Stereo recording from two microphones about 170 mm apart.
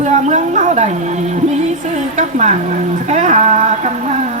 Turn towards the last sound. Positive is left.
turn(degrees=-45)  # may be behind; listen again after turning